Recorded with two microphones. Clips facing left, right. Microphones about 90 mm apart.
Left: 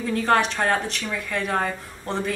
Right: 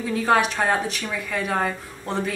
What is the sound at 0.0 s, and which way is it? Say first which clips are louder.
Speech: even; 5° right (ahead or behind).